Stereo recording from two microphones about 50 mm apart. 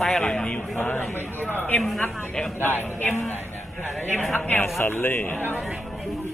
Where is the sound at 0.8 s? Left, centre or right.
Left.